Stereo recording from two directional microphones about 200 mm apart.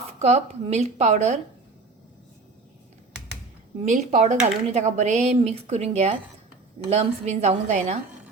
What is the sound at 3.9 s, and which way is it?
Speech, 35° right (ahead or behind).